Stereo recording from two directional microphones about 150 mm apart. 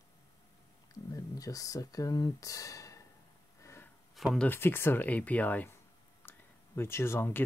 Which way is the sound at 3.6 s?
15° left (ahead or behind).